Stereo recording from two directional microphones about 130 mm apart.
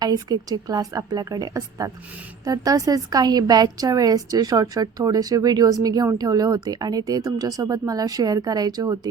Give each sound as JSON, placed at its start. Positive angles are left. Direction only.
{"t": 0.0, "sound": "a woman's voice", "side_deg": -30}